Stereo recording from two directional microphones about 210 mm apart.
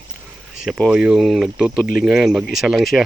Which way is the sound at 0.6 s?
Centre (ahead or behind).